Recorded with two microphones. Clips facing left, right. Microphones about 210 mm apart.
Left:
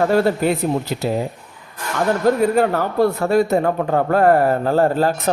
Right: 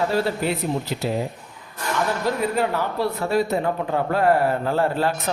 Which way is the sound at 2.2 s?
45° left (ahead or behind).